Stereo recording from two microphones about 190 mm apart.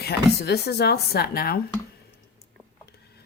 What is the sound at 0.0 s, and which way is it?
Speech, 60° left (ahead or behind).